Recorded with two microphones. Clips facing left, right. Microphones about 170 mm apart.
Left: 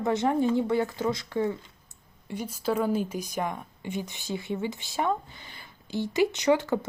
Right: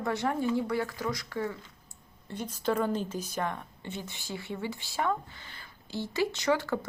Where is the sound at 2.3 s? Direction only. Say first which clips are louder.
Left 2 dB; 10° left (ahead or behind).